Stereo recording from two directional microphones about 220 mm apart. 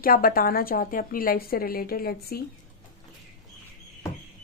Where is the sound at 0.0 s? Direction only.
40° left (ahead or behind).